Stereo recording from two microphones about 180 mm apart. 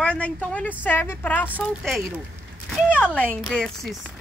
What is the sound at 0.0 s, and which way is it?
A woman's voice, 5° left (ahead or behind).